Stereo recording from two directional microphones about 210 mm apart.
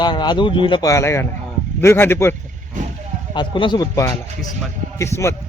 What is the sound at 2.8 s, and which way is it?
Vehicle, 35° right (ahead or behind).